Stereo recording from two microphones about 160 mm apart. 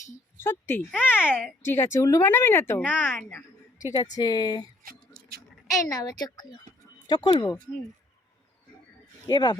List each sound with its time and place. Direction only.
0.3 s a woman's voice: 15° left (ahead or behind)
3.9 s speech: 25° left (ahead or behind)
4.8 s a sound: 65° right (ahead or behind)
5.9 s speech: 25° left (ahead or behind)
9.2 s speech: 25° left (ahead or behind)